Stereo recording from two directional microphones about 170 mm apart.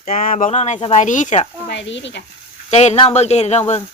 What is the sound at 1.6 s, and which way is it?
Speech, 90° left.